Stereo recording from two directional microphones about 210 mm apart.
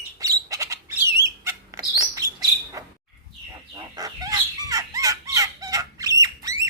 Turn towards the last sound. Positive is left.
turn(degrees=-15)  # may be behind; listen again after turning